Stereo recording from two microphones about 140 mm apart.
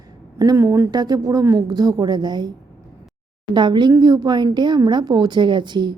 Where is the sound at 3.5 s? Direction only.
35° right (ahead or behind).